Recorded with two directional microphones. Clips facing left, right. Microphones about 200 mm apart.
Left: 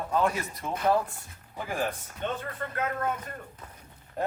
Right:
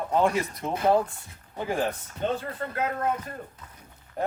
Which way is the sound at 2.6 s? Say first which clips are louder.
Right 3 dB; 35° right (ahead or behind).